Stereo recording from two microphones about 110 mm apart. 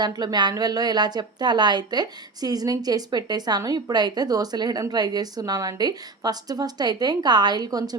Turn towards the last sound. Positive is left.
turn(degrees=-35)  # may be behind; listen again after turning